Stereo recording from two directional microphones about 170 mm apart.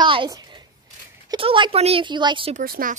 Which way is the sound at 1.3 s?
30° right (ahead or behind).